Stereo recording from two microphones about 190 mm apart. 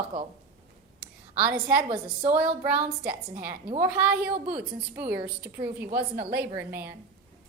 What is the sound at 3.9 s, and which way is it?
A woman's voice, 5° right (ahead or behind).